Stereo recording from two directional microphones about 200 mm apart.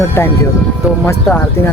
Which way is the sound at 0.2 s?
15° left (ahead or behind).